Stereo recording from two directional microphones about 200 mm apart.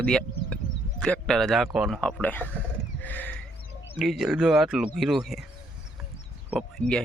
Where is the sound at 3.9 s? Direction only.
Centre (ahead or behind).